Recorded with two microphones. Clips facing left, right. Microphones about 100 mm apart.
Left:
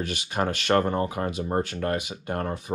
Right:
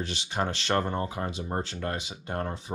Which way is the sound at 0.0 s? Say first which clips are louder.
Left 3 dB; 50° left (ahead or behind).